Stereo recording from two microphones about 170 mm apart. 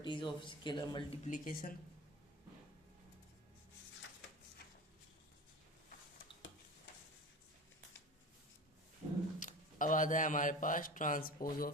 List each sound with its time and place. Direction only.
0.0 s speech: 30° left (ahead or behind)
1.2 s speech: 50° left (ahead or behind)
9.4 s speech: 50° left (ahead or behind)